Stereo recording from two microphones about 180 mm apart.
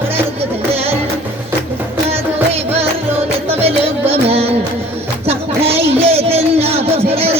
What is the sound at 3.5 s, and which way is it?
Music, 35° right (ahead or behind).